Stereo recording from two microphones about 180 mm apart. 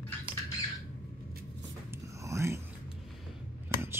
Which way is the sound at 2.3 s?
15° right (ahead or behind).